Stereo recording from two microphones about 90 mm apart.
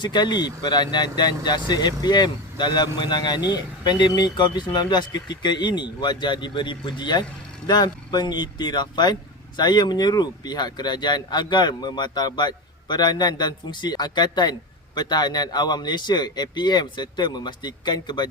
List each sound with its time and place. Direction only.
0.0 s speech: 55° left (ahead or behind)